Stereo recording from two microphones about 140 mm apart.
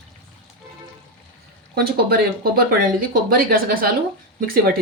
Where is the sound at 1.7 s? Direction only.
90° right.